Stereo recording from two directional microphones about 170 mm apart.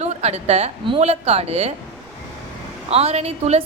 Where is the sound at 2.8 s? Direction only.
35° right (ahead or behind).